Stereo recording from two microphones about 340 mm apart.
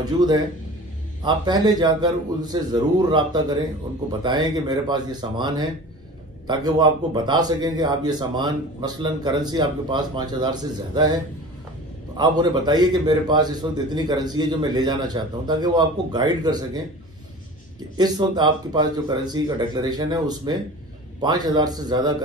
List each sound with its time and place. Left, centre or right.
0.0 s speech: centre
12.2 s speech: centre
17.9 s speech: centre